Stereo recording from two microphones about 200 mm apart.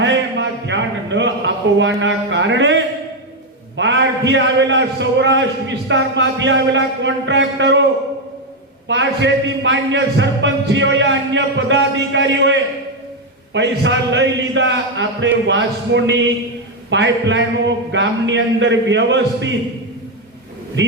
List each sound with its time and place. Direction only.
0.0 s a sound: 65° right (ahead or behind)
2.0 s a man's voice: 65° right (ahead or behind)
8.9 s a man's voice: 65° right (ahead or behind)
20.8 s a man's voice: 70° right (ahead or behind)